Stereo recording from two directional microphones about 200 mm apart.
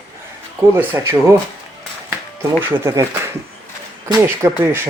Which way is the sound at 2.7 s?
15° right (ahead or behind).